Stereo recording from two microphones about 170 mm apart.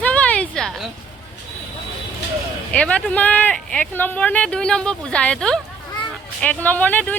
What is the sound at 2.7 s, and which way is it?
Speech, 5° left (ahead or behind).